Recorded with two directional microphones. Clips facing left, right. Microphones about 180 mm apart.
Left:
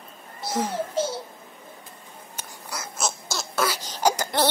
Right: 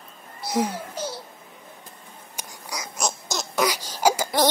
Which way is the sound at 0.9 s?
25° left (ahead or behind).